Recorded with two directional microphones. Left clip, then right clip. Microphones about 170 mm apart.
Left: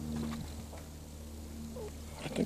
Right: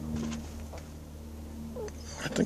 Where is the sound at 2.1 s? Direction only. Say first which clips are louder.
Right 5 dB; 25° right (ahead or behind).